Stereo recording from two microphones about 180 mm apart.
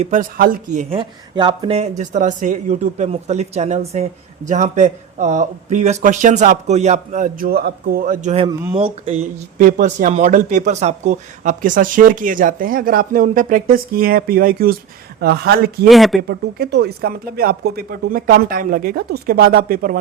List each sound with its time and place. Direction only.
0.0 s speech: 45° right (ahead or behind)
0.9 s speech: 30° right (ahead or behind); by 15.9 s 60° right (ahead or behind)
15.9 s speech: centre (ahead or behind)
16.2 s speech: 60° right (ahead or behind)